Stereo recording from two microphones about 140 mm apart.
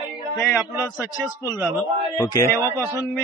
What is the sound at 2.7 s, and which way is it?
Speech, 20° right (ahead or behind).